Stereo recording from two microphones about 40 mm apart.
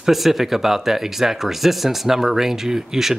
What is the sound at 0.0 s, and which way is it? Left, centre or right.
Speech, centre.